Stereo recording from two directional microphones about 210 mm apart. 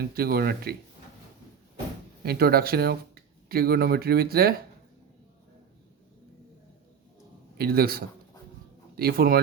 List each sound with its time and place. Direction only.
0.0 s speech: 45° right (ahead or behind)
2.2 s speech: 45° right (ahead or behind)
7.6 s speech: 45° right (ahead or behind)